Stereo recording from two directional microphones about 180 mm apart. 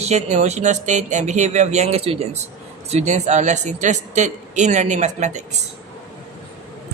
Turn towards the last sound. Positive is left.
turn(degrees=-40)  # may be behind; listen again after turning